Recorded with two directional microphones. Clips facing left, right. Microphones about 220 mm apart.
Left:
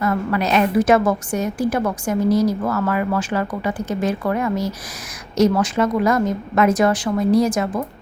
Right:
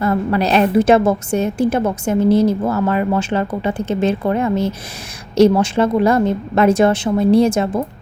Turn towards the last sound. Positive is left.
turn(degrees=-25)  # may be behind; listen again after turning